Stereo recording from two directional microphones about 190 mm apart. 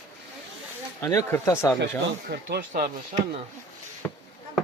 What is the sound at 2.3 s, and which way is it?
Speech, 55° right (ahead or behind).